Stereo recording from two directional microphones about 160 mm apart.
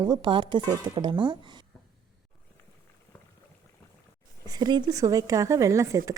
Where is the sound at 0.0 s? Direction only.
30° right (ahead or behind).